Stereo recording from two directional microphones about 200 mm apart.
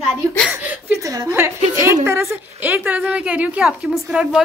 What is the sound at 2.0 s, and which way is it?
Speech, 15° right (ahead or behind).